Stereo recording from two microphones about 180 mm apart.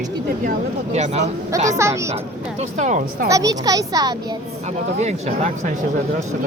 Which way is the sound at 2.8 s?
45° right (ahead or behind).